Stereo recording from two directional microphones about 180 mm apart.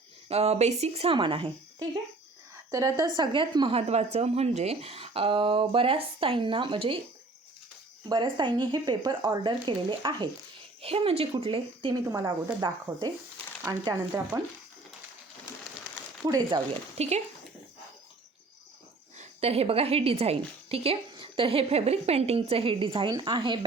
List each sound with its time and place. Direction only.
0.3 s a woman's voice: 35° right (ahead or behind)
2.6 s a woman's voice: 20° right (ahead or behind)
8.1 s a woman's voice: 25° right (ahead or behind)
16.2 s a woman's voice: 20° right (ahead or behind)
17.0 s a woman's voice: 40° right (ahead or behind)
19.1 s a woman's voice: 40° right (ahead or behind)